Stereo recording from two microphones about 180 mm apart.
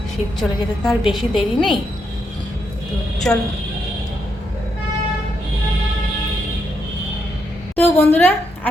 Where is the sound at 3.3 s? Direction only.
5° left (ahead or behind).